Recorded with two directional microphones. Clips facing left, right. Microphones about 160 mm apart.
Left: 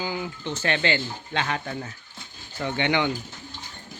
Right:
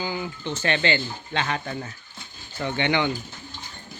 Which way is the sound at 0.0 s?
10° left (ahead or behind).